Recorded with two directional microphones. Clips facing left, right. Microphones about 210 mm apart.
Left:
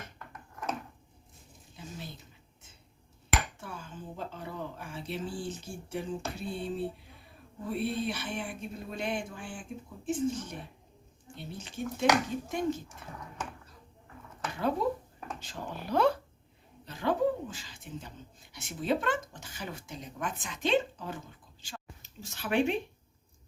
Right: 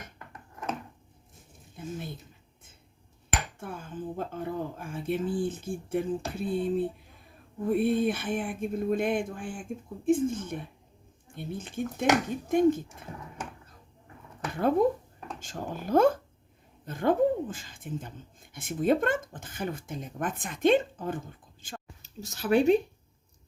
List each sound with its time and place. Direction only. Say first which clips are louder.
1.7 s speech: right 7 dB; 55° right (ahead or behind)
3.6 s speech: right 6 dB; 55° right (ahead or behind)
14.5 s speech: right 6 dB; 50° right (ahead or behind)
22.0 s speech: right 8 dB; 40° right (ahead or behind)